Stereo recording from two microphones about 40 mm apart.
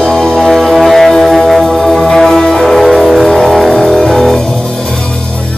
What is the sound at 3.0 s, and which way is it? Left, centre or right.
Vehicle, centre.